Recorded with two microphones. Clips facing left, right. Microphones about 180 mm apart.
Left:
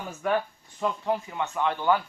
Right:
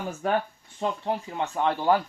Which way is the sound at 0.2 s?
30° right (ahead or behind).